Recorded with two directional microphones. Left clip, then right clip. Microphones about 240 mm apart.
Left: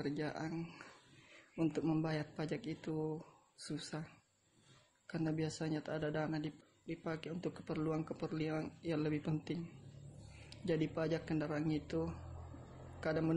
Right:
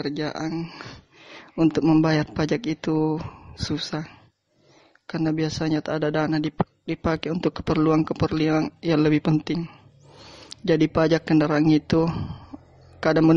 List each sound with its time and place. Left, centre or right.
0.0 s a man's voice: right